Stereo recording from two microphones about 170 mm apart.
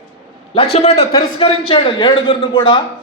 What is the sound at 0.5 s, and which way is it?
A man's voice, 35° left (ahead or behind).